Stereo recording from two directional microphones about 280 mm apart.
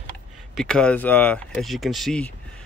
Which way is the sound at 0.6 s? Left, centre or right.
Centre.